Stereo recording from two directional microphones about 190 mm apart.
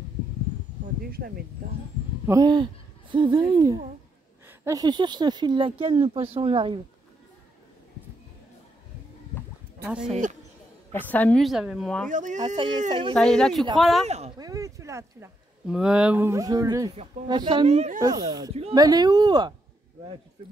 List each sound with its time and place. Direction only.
1.1 s speech: 50° right (ahead or behind)
2.2 s speech: 20° right (ahead or behind)
9.8 s a woman's voice: 5° right (ahead or behind)
10.9 s a woman's voice: 10° left (ahead or behind)
12.1 s speech: 40° right (ahead or behind)
12.6 s speech: 25° right (ahead or behind)
13.1 s a woman's voice: 5° left (ahead or behind)
14.0 s speech: 35° right (ahead or behind)
14.4 s speech: 15° right (ahead or behind); by 18.0 s 35° right (ahead or behind)
18.0 s speech: 20° right (ahead or behind)
18.5 s speech: 35° right (ahead or behind)
18.8 s speech: 20° right (ahead or behind)